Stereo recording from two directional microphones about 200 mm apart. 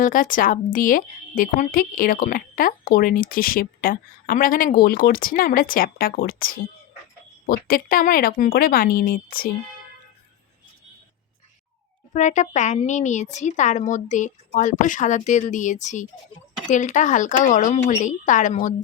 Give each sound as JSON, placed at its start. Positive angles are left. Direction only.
{"t": 0.0, "sound": "speech", "side_deg": 40}
{"t": 12.1, "sound": "speech", "side_deg": 35}